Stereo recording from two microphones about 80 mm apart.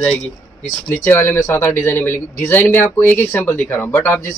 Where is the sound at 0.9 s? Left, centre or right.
Left.